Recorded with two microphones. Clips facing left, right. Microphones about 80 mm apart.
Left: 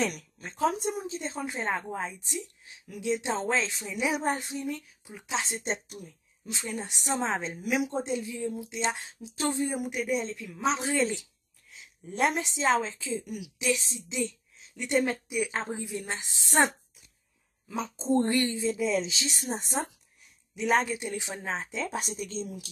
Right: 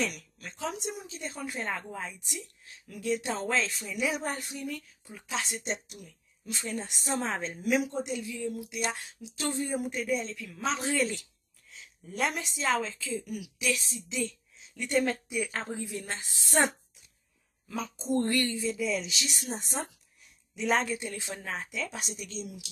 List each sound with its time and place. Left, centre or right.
0.0 s speech: left; by 5.4 s centre
5.4 s a woman's voice: left
6.4 s speech: centre
7.9 s a woman's voice: left
9.6 s speech: centre
10.1 s speech: left
12.1 s speech: left
14.1 s a woman's voice: centre
17.7 s speech: left
20.5 s a woman's voice: centre
20.9 s a woman's voice: centre; by 22.7 s left